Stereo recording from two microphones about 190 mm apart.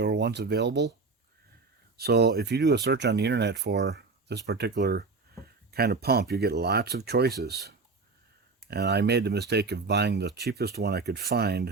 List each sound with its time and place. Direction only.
0.0 s speech: 60° right (ahead or behind)
2.0 s speech: 60° right (ahead or behind)